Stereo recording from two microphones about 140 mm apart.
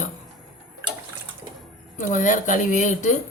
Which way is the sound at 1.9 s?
65° left (ahead or behind).